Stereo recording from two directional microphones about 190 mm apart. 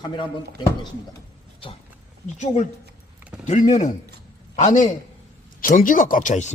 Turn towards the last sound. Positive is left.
turn(degrees=40)  # may be behind; listen again after turning